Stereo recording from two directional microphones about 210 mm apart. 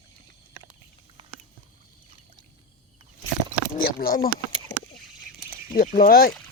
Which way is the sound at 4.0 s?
45° left (ahead or behind).